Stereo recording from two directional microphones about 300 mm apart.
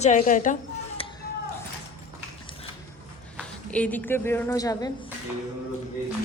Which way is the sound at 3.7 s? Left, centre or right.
Centre.